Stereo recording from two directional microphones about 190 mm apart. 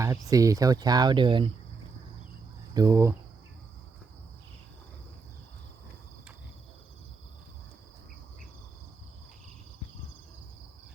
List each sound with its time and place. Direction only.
0.0 s speech: 15° right (ahead or behind)
2.7 s speech: 15° right (ahead or behind)